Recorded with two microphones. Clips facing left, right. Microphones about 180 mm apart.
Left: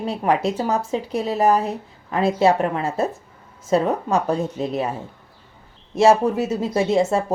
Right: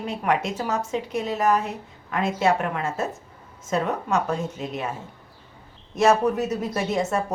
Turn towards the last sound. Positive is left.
turn(degrees=30)  # may be behind; listen again after turning